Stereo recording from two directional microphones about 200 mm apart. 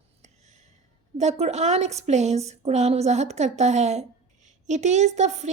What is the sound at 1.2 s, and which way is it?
Speech, 35° right (ahead or behind).